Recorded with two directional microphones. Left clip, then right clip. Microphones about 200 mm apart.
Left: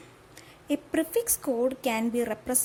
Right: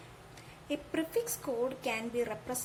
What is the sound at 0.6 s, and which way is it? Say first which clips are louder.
A woman's voice: left 7 dB; 50° left (ahead or behind).